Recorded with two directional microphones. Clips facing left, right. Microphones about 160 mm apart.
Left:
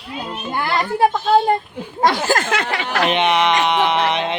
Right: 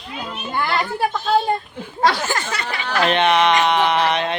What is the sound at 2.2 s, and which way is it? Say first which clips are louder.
Speech: left 5 dB; 45° left (ahead or behind).